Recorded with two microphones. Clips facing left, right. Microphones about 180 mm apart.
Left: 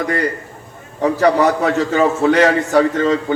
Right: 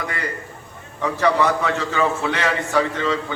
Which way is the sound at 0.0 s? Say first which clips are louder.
Left 9 dB; 45° left (ahead or behind).